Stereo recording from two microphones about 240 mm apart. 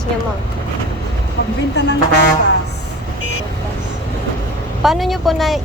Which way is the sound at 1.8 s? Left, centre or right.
Left.